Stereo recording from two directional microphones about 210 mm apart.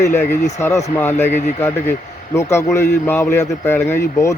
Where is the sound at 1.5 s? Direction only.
10° left (ahead or behind).